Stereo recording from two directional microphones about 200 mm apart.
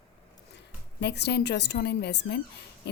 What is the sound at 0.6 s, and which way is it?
A woman's voice, 55° left (ahead or behind).